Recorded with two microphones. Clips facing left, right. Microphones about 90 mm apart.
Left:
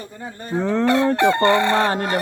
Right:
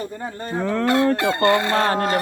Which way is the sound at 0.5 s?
20° left (ahead or behind).